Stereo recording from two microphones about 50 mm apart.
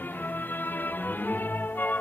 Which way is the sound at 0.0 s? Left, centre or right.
Left.